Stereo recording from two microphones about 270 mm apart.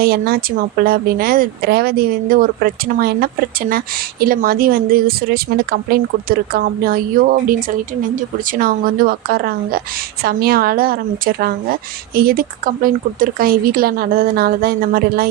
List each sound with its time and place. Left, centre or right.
0.0 s speech: right